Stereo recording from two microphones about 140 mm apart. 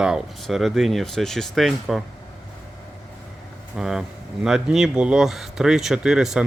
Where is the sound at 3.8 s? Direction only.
5° right (ahead or behind).